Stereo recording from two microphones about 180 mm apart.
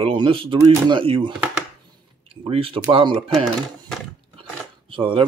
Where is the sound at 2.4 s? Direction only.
30° right (ahead or behind).